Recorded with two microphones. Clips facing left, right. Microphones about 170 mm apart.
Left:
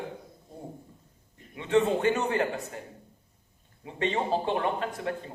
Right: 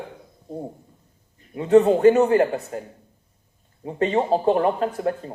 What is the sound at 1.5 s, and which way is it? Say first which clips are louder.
A woman's voice: right 9 dB; 35° right (ahead or behind).